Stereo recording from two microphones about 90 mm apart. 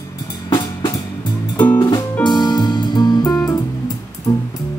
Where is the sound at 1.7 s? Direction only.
50° left (ahead or behind).